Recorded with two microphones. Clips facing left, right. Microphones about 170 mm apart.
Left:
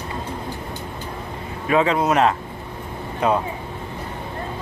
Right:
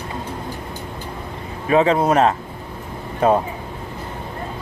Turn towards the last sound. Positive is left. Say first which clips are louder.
# right 4 dB
turn(degrees=-45)  # may be behind; listen again after turning